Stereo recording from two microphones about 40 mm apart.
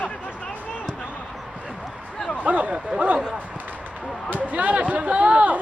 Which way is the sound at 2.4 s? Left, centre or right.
Right.